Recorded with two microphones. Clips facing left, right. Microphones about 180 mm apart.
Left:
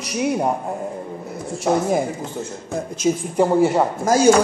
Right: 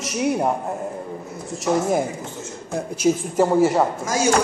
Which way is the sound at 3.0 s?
5° right (ahead or behind).